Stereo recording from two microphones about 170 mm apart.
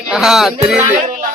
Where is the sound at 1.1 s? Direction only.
50° right (ahead or behind).